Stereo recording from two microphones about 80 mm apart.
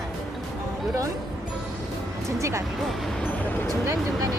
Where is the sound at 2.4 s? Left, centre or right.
Right.